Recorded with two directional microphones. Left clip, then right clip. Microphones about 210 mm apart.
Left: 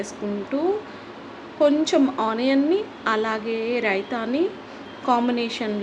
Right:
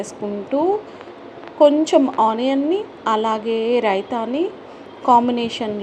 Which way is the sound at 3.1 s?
15° right (ahead or behind).